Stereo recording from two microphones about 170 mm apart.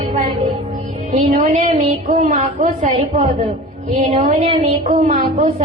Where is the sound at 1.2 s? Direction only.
45° right (ahead or behind).